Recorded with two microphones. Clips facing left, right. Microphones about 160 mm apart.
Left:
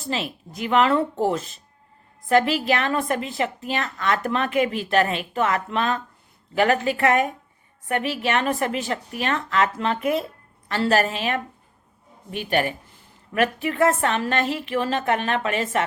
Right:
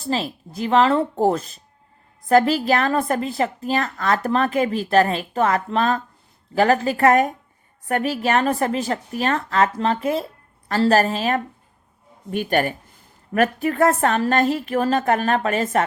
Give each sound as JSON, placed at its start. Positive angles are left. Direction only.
{"t": 0.0, "sound": "a woman's voice", "side_deg": -35}